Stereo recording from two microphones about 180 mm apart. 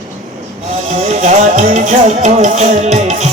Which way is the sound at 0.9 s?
40° right (ahead or behind).